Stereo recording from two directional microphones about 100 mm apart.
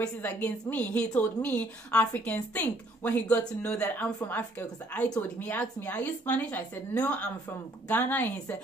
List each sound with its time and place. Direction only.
0.2 s a woman's voice: 15° left (ahead or behind)